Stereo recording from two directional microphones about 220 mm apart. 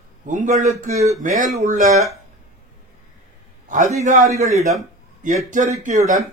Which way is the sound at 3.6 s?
35° right (ahead or behind).